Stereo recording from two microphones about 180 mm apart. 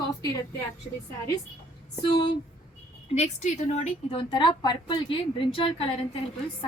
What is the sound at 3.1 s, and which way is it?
A woman's voice, 40° left (ahead or behind).